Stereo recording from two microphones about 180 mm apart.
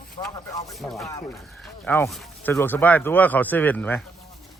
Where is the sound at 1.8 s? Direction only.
10° left (ahead or behind).